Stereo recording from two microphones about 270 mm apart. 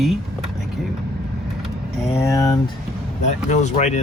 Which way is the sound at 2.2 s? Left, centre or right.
Centre.